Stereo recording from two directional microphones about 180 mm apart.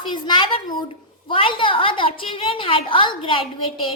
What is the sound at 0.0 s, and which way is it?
A woman's voice, 25° left (ahead or behind).